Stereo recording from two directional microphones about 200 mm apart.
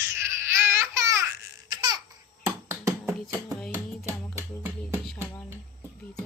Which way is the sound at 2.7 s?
15° right (ahead or behind).